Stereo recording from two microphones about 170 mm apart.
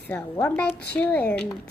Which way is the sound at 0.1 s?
10° left (ahead or behind).